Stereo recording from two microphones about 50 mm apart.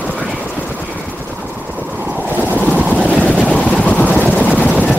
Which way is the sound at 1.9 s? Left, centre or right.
Right.